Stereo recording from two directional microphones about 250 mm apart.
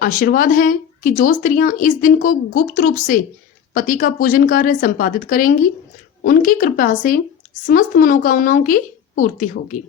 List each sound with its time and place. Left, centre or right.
0.0 s speech: left